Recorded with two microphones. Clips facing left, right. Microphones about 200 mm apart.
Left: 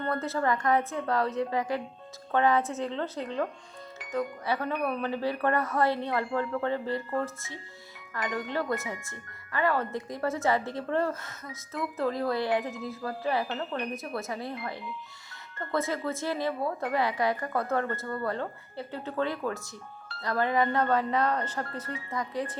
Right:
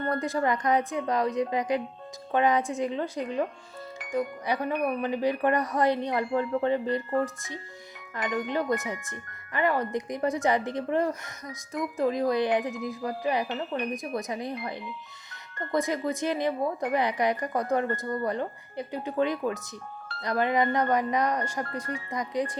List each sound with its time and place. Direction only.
0.1 s speech: 15° right (ahead or behind)
15.7 s speech: 15° right (ahead or behind)